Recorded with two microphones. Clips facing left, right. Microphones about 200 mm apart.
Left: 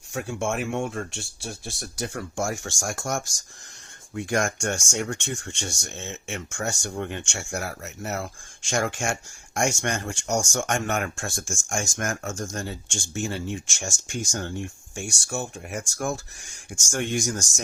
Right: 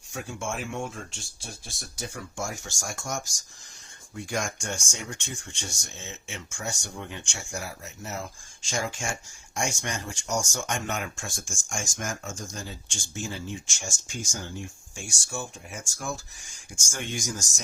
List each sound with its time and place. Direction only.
0.1 s speech: 65° left (ahead or behind)
13.1 s speech: 65° left (ahead or behind)